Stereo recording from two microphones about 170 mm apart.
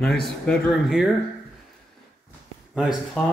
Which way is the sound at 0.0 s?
Centre (ahead or behind).